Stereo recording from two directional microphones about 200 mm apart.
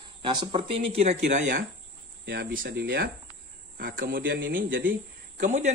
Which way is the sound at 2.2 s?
55° right (ahead or behind).